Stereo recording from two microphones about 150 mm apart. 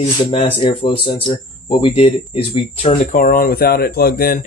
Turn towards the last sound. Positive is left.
turn(degrees=80)